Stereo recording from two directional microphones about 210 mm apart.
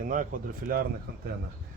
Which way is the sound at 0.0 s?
40° right (ahead or behind).